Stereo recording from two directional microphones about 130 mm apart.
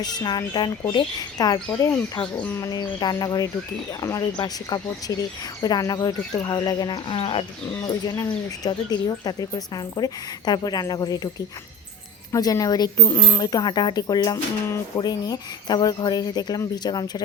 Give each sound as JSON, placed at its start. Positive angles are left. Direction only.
{"t": 0.0, "sound": "speech", "side_deg": 30}
{"t": 2.3, "sound": "speech", "side_deg": 10}
{"t": 2.6, "sound": "speech", "side_deg": 30}
{"t": 12.3, "sound": "speech", "side_deg": 25}